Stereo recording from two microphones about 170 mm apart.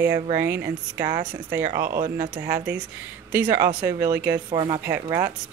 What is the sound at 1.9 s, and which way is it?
Speech, 55° right (ahead or behind).